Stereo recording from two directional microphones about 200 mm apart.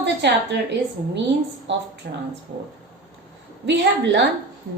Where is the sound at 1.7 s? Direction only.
65° right (ahead or behind).